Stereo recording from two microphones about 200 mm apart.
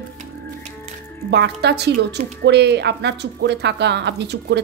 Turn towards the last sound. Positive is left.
turn(degrees=-60)  # may be behind; listen again after turning